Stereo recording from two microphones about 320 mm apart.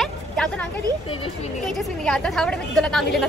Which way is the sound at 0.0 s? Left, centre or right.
Centre.